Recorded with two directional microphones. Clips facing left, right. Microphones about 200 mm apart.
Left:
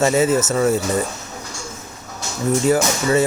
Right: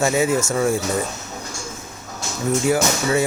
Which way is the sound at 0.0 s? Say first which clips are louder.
Left 3 dB; 10° right (ahead or behind).